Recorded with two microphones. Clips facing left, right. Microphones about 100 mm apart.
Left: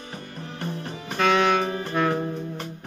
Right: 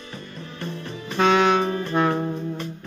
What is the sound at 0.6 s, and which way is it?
Music, 40° left (ahead or behind).